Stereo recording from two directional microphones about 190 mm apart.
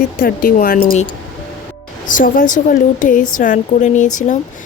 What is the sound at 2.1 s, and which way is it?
Speech, 45° left (ahead or behind).